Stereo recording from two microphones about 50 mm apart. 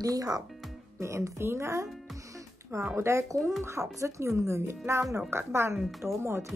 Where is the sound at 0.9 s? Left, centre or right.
Right.